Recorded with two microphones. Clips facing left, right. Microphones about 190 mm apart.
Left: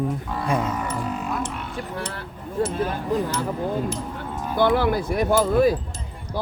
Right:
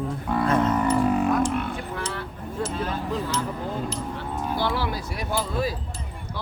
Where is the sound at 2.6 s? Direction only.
55° left (ahead or behind).